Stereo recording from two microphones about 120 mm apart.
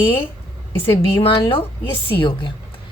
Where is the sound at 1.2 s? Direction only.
45° left (ahead or behind).